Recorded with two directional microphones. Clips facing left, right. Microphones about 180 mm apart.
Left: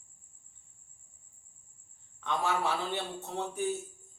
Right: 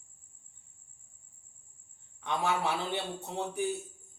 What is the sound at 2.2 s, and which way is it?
Speech, 15° right (ahead or behind).